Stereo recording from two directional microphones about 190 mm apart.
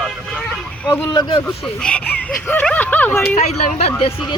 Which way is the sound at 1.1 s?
20° left (ahead or behind).